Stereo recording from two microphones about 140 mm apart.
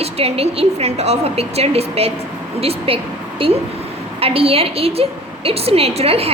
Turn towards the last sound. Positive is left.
turn(degrees=-45)  # may be behind; listen again after turning